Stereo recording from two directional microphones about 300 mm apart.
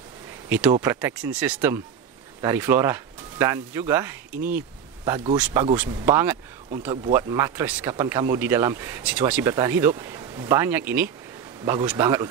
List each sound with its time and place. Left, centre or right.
0.5 s speech: centre